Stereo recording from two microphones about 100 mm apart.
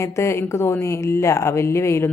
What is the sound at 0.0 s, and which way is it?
Speech, 25° left (ahead or behind).